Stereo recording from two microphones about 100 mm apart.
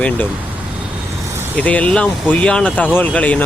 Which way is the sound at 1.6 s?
15° left (ahead or behind).